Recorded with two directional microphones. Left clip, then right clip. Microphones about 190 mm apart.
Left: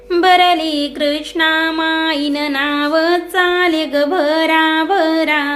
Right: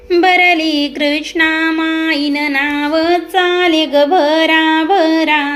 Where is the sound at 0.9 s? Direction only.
5° right (ahead or behind).